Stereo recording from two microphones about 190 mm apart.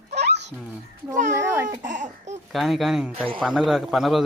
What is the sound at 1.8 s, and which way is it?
Speech, 40° right (ahead or behind).